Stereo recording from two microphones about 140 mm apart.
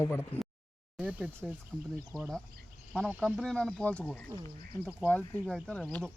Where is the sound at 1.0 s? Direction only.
10° right (ahead or behind).